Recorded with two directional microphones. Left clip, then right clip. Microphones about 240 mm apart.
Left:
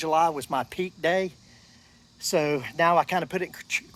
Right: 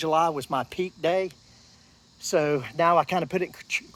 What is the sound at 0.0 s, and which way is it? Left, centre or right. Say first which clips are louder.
Speech: even; centre.